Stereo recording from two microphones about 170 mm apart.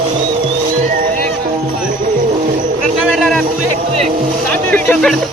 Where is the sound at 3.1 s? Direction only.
Centre (ahead or behind).